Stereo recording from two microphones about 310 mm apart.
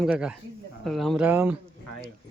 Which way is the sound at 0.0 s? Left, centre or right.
Centre.